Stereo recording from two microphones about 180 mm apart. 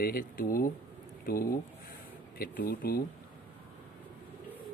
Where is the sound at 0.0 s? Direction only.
55° left (ahead or behind).